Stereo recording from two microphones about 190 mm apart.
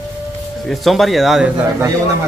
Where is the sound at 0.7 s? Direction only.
Centre (ahead or behind).